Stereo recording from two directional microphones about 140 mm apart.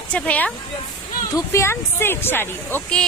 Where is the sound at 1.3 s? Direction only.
20° left (ahead or behind).